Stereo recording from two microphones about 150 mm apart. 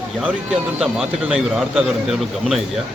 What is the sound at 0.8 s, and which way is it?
A man's voice, 5° right (ahead or behind).